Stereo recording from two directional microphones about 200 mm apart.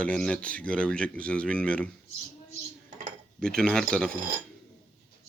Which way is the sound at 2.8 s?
40° right (ahead or behind).